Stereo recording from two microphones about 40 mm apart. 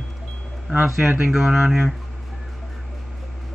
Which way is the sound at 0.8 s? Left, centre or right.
Right.